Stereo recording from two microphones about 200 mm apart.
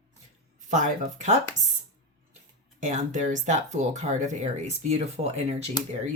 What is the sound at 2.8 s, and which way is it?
Speech, 35° right (ahead or behind).